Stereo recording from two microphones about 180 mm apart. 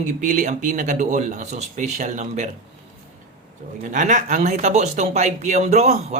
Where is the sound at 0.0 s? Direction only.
45° right (ahead or behind).